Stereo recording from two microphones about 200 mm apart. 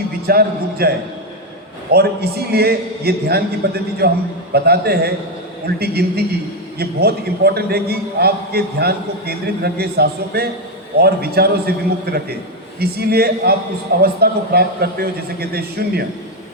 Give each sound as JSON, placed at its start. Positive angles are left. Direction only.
{"t": 0.3, "sound": "a man's voice", "side_deg": -50}